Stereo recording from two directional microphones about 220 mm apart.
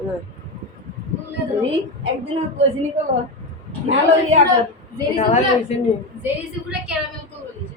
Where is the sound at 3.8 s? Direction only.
30° right (ahead or behind).